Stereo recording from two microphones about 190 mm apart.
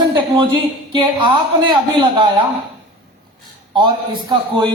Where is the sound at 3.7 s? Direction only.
25° right (ahead or behind).